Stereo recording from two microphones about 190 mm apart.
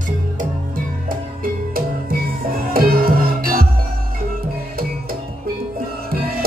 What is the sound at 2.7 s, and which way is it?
Music, 50° right (ahead or behind).